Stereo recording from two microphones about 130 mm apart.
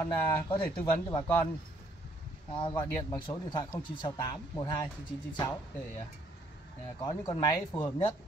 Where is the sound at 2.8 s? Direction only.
35° left (ahead or behind).